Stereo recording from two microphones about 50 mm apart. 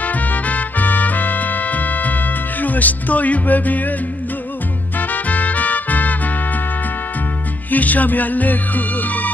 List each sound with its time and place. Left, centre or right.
0.0 s music: left
4.9 s music: left
7.7 s music: left